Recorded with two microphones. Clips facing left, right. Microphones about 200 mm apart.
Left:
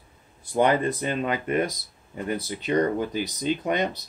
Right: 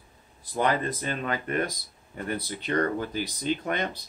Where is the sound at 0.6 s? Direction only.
20° left (ahead or behind).